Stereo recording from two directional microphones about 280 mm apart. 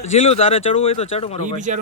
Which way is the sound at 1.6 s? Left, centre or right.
Right.